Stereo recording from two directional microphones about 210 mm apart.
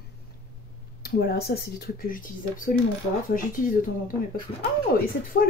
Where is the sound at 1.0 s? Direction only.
50° left (ahead or behind).